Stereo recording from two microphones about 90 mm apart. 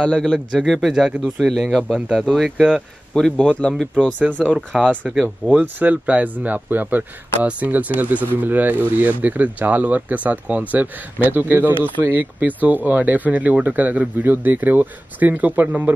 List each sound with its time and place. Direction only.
0.0 s a man's voice: 10° left (ahead or behind)
0.5 s a man's voice: 5° right (ahead or behind)
3.2 s a man's voice: 5° left (ahead or behind)
3.9 s speech: 15° right (ahead or behind)